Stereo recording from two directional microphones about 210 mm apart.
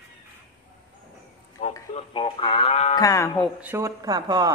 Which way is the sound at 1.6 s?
30° left (ahead or behind).